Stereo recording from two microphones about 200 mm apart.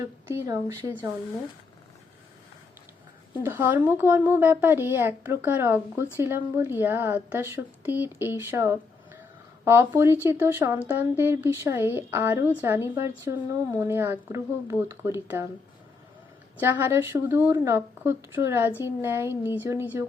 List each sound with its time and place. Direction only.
0.0 s a woman's voice: 15° right (ahead or behind)
3.4 s a woman's voice: 10° right (ahead or behind)
16.6 s a woman's voice: 10° right (ahead or behind)